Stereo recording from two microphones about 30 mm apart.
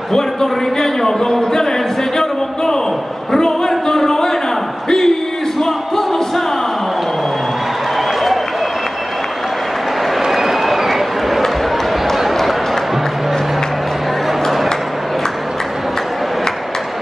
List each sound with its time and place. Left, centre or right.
0.1 s a man's voice: centre
2.1 s a sound: left
5.6 s music: centre
10.3 s run: centre